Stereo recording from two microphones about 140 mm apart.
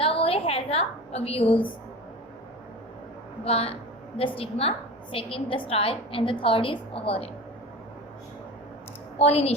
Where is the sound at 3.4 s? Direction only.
45° left (ahead or behind).